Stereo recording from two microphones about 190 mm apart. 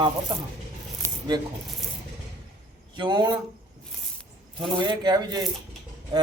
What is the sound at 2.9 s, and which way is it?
Speech, 25° right (ahead or behind).